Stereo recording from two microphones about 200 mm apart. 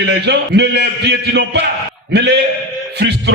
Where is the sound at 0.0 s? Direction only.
60° right (ahead or behind).